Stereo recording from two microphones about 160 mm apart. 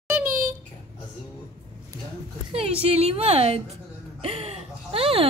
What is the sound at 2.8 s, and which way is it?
A woman's voice, 40° right (ahead or behind).